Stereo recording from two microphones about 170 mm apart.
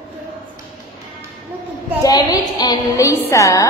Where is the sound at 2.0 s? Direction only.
25° left (ahead or behind).